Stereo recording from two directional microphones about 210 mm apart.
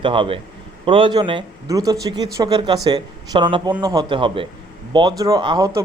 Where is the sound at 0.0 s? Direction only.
25° right (ahead or behind).